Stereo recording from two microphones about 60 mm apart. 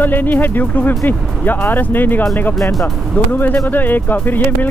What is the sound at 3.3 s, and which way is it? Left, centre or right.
Speech, left.